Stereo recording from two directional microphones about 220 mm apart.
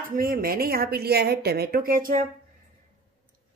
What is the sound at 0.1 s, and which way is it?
Speech, 40° right (ahead or behind).